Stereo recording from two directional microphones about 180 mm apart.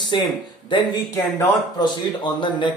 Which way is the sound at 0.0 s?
25° left (ahead or behind).